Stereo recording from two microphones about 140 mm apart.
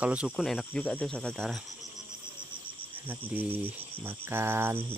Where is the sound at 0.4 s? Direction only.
5° left (ahead or behind).